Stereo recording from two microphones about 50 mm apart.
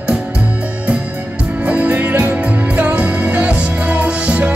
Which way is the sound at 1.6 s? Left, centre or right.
Right.